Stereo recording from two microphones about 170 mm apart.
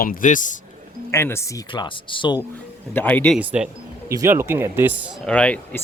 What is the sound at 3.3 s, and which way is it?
Speech, 5° right (ahead or behind).